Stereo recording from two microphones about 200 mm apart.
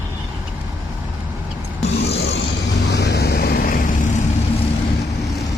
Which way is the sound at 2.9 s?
55° left (ahead or behind).